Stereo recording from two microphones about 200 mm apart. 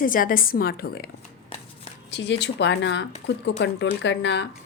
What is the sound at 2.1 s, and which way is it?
A woman's voice, 60° left (ahead or behind).